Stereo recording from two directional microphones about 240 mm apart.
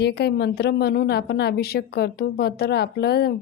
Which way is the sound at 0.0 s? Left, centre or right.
Left.